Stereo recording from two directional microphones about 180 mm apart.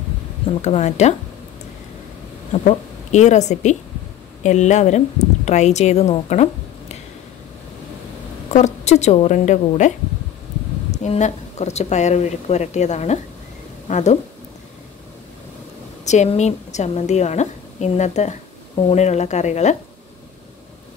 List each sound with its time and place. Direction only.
0.5 s a woman's voice: 35° left (ahead or behind)
2.5 s a woman's voice: 40° left (ahead or behind)
8.5 s a woman's voice: 40° left (ahead or behind)
16.1 s a woman's voice: 40° left (ahead or behind)